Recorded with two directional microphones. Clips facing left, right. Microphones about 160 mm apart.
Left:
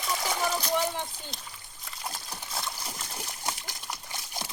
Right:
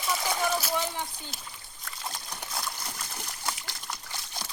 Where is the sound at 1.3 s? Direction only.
5° right (ahead or behind).